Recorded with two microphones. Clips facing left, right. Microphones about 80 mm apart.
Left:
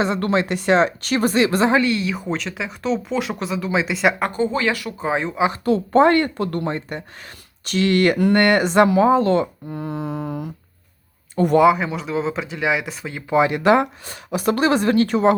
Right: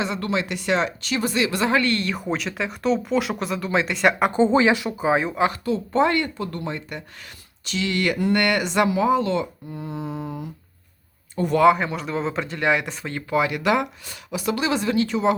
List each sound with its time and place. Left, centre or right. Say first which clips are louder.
0.0 s a woman's voice: left 5 dB; left
1.8 s speech: left 3 dB; centre
4.3 s speech: right 3 dB; right
5.0 s speech: right 1 dB; centre
5.6 s speech: left 10 dB; left
6.7 s a woman's voice: left 5 dB; left
7.6 s speech: left 7 dB; left
11.6 s speech: left 1 dB; centre
13.3 s speech: left 5 dB; left